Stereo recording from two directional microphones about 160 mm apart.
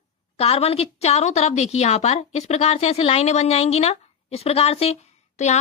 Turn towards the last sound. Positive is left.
turn(degrees=45)  # may be behind; listen again after turning